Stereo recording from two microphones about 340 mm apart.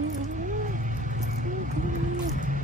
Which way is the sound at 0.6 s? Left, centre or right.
Right.